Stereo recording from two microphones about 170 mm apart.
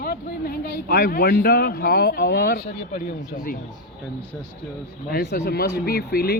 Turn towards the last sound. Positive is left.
turn(degrees=65)  # may be behind; listen again after turning